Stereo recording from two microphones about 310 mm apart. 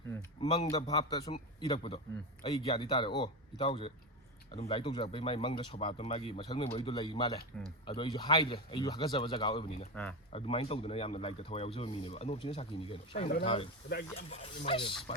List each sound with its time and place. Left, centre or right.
0.1 s speech: centre
7.5 s speech: centre
7.9 s speech: centre
9.9 s speech: centre
10.3 s speech: centre